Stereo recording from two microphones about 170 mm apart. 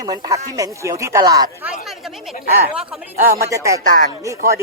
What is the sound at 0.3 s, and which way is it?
Speech, 20° right (ahead or behind).